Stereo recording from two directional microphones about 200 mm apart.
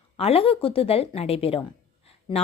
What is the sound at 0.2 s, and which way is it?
Speech, 30° left (ahead or behind).